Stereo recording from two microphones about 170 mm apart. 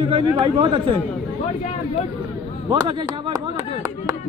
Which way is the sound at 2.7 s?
25° right (ahead or behind).